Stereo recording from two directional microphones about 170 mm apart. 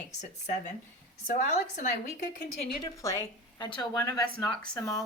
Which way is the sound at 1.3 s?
45° left (ahead or behind).